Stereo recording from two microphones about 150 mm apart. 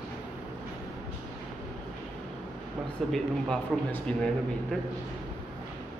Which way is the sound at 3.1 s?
10° left (ahead or behind).